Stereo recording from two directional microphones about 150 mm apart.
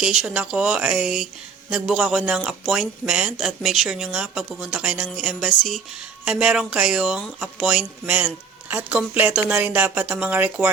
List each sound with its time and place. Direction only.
0.0 s speech: 5° right (ahead or behind)